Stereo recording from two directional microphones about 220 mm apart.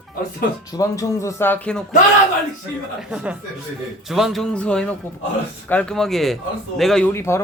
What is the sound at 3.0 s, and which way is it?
A man's voice, 5° right (ahead or behind).